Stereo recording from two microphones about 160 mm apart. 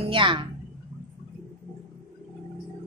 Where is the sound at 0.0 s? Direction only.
35° right (ahead or behind).